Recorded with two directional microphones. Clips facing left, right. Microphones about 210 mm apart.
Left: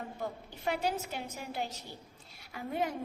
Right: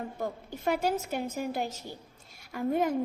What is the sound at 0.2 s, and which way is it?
A woman's voice, 45° right (ahead or behind).